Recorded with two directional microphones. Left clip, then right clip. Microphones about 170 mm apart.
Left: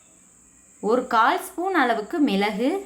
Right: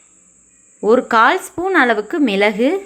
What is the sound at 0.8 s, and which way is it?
A woman's voice, 30° right (ahead or behind).